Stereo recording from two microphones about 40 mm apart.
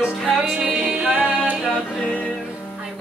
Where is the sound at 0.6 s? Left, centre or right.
Right.